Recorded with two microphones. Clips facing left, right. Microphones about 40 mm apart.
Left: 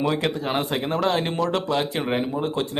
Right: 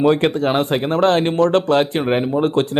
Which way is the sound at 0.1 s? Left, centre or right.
Right.